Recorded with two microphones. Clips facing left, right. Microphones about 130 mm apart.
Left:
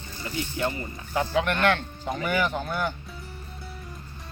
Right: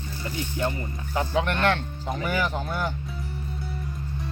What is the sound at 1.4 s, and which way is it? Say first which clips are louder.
Speech: even; 30° right (ahead or behind).